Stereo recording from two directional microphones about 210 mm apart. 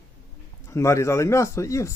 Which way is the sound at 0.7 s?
15° left (ahead or behind).